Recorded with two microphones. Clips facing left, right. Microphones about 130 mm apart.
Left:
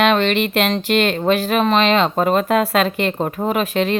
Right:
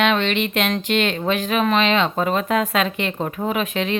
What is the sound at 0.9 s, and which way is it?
Speech, 50° left (ahead or behind).